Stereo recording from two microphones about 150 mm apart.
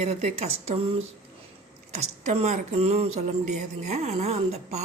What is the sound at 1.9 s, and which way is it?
Speech, 50° right (ahead or behind).